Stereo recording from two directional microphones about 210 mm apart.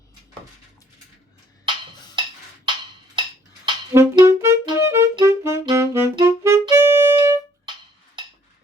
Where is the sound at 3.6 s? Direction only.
15° right (ahead or behind).